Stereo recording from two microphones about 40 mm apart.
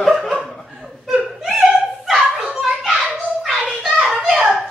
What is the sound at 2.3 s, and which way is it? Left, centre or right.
Children playing, centre.